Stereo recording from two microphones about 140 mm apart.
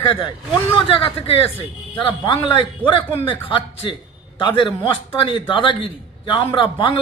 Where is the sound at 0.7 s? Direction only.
40° left (ahead or behind).